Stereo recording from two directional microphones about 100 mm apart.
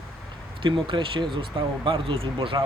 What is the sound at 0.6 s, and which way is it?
Speech, 55° right (ahead or behind).